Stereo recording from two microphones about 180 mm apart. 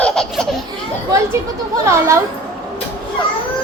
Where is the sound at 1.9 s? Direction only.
15° right (ahead or behind).